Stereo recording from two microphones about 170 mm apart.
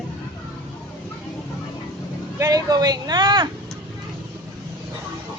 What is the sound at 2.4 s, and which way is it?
Speech, 20° right (ahead or behind).